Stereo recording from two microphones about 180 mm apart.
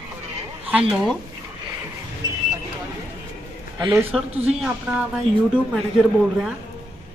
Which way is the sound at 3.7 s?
15° right (ahead or behind).